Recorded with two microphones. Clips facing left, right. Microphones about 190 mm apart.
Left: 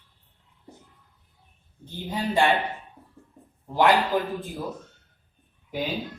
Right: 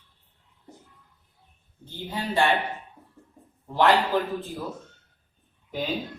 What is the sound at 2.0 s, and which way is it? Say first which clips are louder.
Speech: left 2 dB; 15° left (ahead or behind).